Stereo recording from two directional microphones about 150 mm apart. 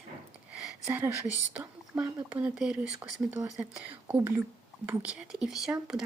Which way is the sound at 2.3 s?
5° right (ahead or behind).